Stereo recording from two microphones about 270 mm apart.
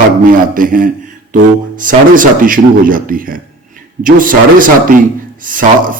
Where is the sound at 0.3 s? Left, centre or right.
Right.